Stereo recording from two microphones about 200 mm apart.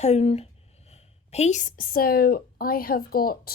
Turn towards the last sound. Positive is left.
turn(degrees=50)  # may be behind; listen again after turning